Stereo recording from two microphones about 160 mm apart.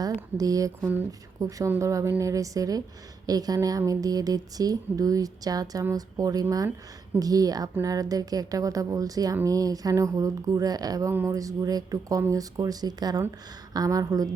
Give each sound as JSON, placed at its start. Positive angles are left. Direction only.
{"t": 0.0, "sound": "a woman's voice", "side_deg": -20}